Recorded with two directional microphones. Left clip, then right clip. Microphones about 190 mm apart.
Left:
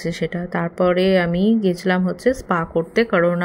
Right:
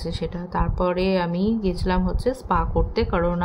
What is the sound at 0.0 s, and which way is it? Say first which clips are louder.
Speech: left 5 dB; 20° left (ahead or behind).